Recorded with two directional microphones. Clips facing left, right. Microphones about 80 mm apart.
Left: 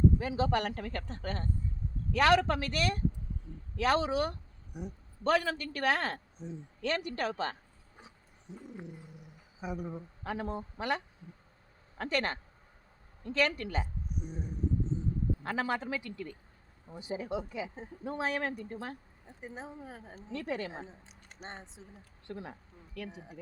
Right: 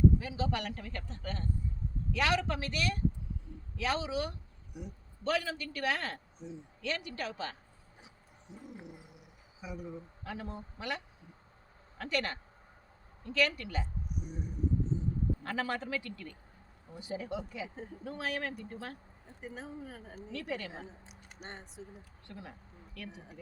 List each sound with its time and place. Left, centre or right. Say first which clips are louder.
0.2 s a man's voice: left 5 dB; left
8.0 s a sound: left 3 dB; left
9.6 s speech: left 4 dB; left
15.4 s speech: left 5 dB; centre
21.1 s a sound: right 1 dB; centre
21.4 s speech: even; left
23.0 s speech: left 4 dB; centre